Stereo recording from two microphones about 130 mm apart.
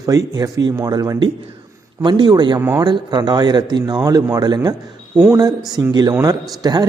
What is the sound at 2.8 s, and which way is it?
A man's voice, 35° right (ahead or behind).